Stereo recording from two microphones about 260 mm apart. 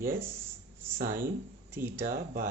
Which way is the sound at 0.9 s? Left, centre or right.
Right.